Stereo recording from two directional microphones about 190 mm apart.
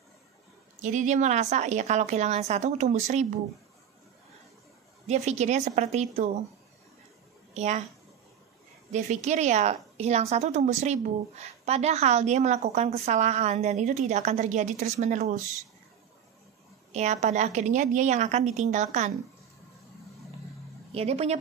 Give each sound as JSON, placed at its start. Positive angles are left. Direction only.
{"t": 0.8, "sound": "a woman's voice", "side_deg": -40}
{"t": 5.0, "sound": "a woman's voice", "side_deg": -35}
{"t": 7.5, "sound": "a woman's voice", "side_deg": -35}
{"t": 8.9, "sound": "a woman's voice", "side_deg": -35}
{"t": 16.9, "sound": "a woman's voice", "side_deg": -35}
{"t": 20.9, "sound": "a woman's voice", "side_deg": -30}